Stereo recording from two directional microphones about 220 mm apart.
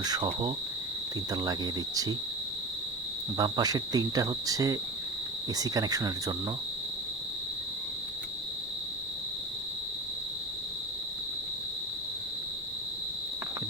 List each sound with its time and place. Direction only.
0.0 s cricket: 20° right (ahead or behind)
3.3 s cricket: 15° right (ahead or behind)